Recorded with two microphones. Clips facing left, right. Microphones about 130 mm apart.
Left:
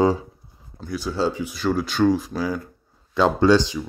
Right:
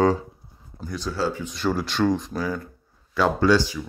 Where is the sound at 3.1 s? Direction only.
20° left (ahead or behind).